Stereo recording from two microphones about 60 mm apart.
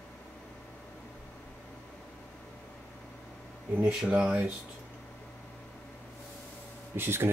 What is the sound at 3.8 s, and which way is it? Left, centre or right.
Speech, centre.